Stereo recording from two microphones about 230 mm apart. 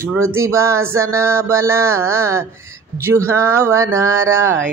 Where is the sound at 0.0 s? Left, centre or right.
Centre.